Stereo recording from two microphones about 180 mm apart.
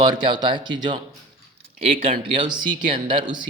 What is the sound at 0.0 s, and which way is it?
Speech, 25° right (ahead or behind).